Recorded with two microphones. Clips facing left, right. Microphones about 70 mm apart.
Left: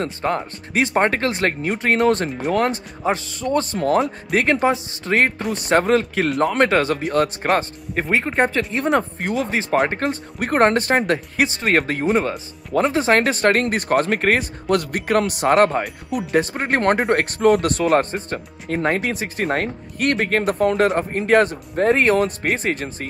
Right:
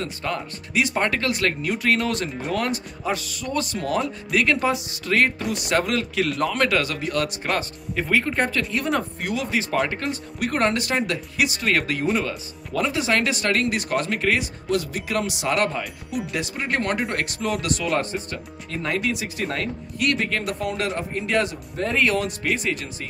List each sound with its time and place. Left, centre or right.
0.0 s speech: left
8.4 s speech: left